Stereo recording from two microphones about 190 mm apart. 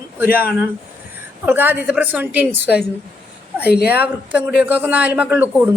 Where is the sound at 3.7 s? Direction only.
55° left (ahead or behind).